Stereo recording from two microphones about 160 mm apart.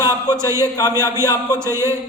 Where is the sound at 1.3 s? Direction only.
25° left (ahead or behind).